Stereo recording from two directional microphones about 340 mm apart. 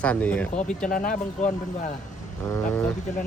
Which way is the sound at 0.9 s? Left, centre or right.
Left.